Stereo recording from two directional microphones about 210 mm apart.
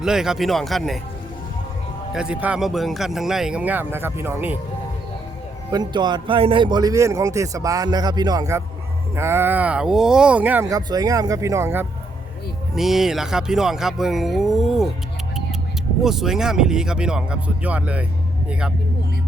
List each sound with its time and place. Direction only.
0.0 s speech: centre (ahead or behind)
2.1 s speech: 5° right (ahead or behind)
5.7 s a man's voice: 20° right (ahead or behind); by 14.8 s centre (ahead or behind)
16.0 s speech: centre (ahead or behind)